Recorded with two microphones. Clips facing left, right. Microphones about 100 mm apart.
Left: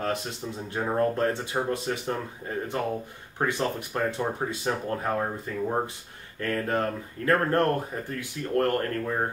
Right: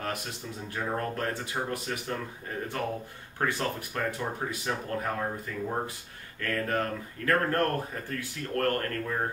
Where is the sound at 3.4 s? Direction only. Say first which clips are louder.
Left 3 dB; 25° left (ahead or behind).